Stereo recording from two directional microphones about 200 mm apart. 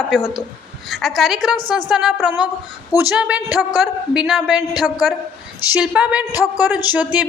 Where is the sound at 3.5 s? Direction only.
20° left (ahead or behind).